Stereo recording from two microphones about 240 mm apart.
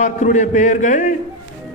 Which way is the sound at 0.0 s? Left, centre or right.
Left.